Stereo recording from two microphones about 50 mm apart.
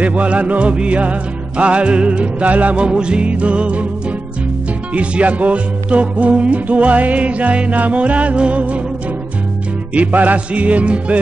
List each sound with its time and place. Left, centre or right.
0.0 s music: right
4.9 s music: right
9.9 s music: right